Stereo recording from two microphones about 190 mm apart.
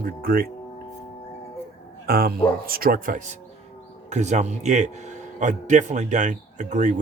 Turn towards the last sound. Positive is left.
turn(degrees=-40)  # may be behind; listen again after turning